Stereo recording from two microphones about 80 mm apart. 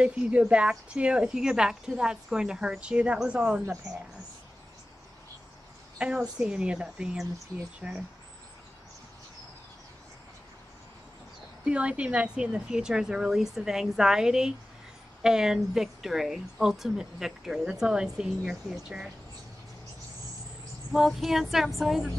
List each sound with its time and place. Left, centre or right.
0.0 s speech: centre
5.9 s speech: centre
11.6 s speech: centre
20.9 s speech: centre